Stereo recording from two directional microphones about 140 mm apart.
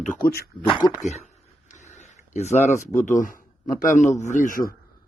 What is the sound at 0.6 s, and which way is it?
Speech, 35° left (ahead or behind).